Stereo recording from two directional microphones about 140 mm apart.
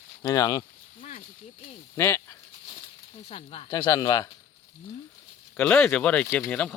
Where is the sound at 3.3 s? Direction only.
40° left (ahead or behind).